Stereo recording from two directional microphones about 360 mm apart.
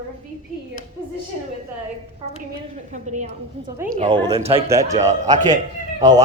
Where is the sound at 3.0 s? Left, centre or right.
Centre.